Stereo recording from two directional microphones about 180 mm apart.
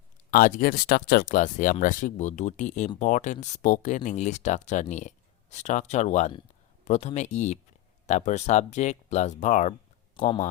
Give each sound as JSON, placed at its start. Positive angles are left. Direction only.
{"t": 0.3, "sound": "speech", "side_deg": 50}
{"t": 10.2, "sound": "speech", "side_deg": 30}